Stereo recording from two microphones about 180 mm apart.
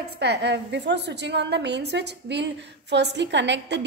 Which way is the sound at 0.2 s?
70° right (ahead or behind).